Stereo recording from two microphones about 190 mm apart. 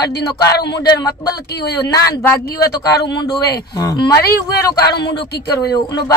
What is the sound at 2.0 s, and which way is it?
Speech, 15° left (ahead or behind).